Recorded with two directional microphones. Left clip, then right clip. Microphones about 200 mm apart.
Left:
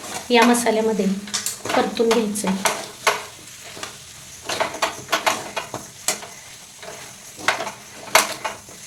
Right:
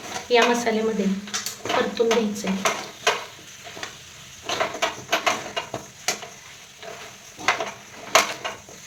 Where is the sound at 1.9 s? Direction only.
45° left (ahead or behind).